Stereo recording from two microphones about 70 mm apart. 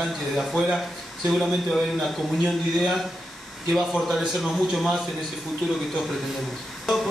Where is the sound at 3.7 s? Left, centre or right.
Centre.